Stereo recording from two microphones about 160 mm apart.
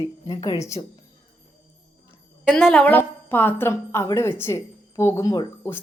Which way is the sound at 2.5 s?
5° left (ahead or behind).